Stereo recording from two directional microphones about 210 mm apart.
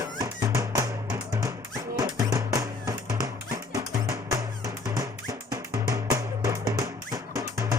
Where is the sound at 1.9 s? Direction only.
15° right (ahead or behind).